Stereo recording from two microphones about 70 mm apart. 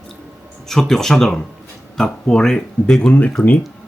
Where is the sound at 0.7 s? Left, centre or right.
Centre.